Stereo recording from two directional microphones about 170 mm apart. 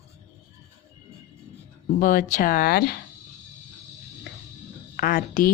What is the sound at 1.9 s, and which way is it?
Speech, 55° left (ahead or behind).